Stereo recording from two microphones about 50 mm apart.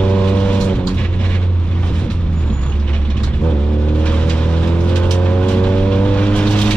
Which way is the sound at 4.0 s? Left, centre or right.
Left.